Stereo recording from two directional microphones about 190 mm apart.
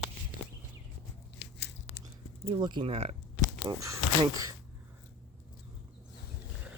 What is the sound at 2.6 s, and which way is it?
Speech, 25° right (ahead or behind).